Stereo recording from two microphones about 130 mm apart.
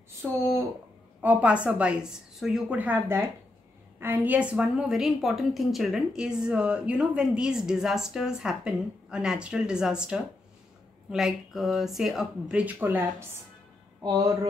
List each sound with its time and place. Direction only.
1.2 s a woman's voice: 10° right (ahead or behind)
14.0 s speech: 30° right (ahead or behind)